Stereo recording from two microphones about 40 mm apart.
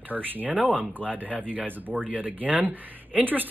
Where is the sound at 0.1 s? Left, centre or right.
Right.